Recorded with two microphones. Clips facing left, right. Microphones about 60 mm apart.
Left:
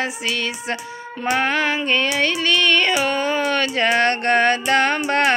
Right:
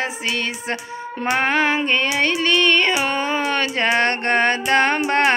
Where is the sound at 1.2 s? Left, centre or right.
Right.